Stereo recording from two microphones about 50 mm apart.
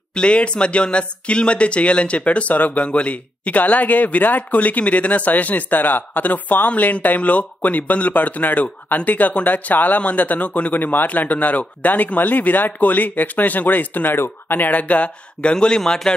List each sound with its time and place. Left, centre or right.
0.1 s speech: left
14.1 s speech: left
15.5 s a man's voice: centre